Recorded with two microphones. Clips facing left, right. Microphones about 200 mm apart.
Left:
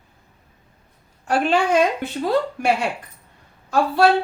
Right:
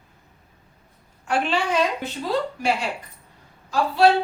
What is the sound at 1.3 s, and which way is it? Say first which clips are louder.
A woman's voice: left 5 dB; 45° left (ahead or behind).